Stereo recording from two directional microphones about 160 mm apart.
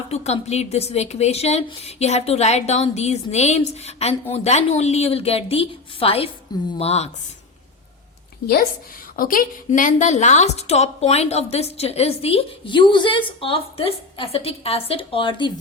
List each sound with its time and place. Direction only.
0.1 s a woman's voice: 45° left (ahead or behind)
9.1 s a woman's voice: 60° left (ahead or behind); by 15.5 s 30° left (ahead or behind)